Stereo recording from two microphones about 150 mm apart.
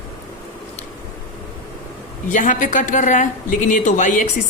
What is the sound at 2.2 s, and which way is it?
A woman's voice, 60° left (ahead or behind).